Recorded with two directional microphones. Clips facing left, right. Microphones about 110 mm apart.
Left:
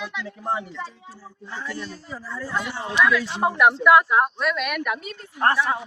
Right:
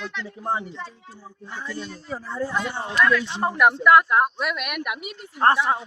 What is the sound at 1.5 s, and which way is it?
Speech, 15° right (ahead or behind).